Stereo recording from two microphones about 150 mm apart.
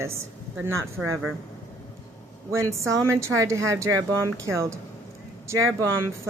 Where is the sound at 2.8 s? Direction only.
20° right (ahead or behind).